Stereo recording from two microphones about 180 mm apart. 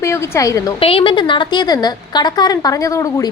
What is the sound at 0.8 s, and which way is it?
A woman's voice, 30° left (ahead or behind).